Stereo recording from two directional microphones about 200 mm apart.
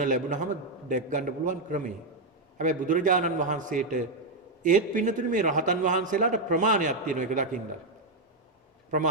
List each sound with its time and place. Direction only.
0.0 s a man's voice: 40° right (ahead or behind)